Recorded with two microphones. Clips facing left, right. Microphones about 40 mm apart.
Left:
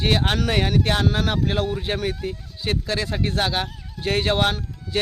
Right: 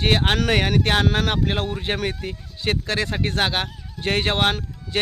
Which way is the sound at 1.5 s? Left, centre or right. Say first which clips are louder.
Left 1 dB; right.